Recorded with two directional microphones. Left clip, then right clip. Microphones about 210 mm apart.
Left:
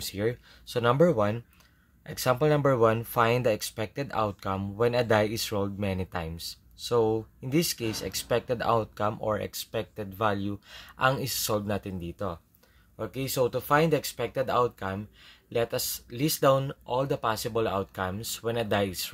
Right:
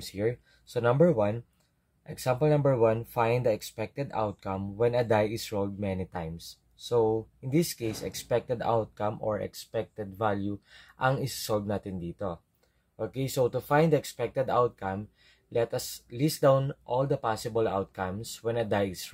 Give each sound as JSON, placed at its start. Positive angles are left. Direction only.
{"t": 0.0, "sound": "speech", "side_deg": 10}